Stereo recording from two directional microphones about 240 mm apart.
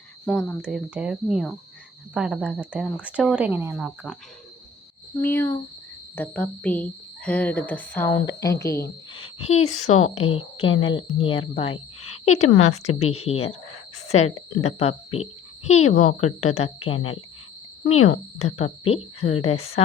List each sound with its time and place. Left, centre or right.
0.3 s a woman's voice: centre
5.2 s a woman's voice: centre
9.6 s a woman's voice: left
11.7 s cricket: left
12.2 s a woman's voice: left
15.2 s insect: left
15.9 s a woman's voice: left
17.8 s speech: left
18.3 s a woman's voice: left